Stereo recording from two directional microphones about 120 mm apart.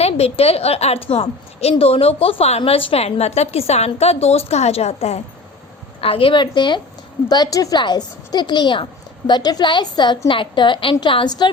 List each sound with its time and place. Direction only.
0.0 s a woman's voice: 60° left (ahead or behind)
6.0 s a woman's voice: 50° left (ahead or behind)